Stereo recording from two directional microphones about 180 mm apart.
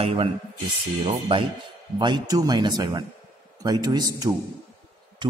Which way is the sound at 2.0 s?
25° right (ahead or behind).